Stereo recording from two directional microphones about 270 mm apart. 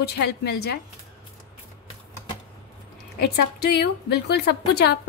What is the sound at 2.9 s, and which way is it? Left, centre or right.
A woman's voice, left.